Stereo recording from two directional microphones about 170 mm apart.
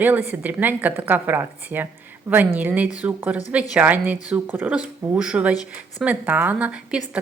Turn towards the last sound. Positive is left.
turn(degrees=-5)  # may be behind; listen again after turning